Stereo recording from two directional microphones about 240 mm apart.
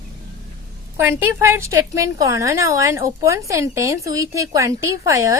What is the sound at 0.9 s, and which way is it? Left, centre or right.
A woman's voice, centre.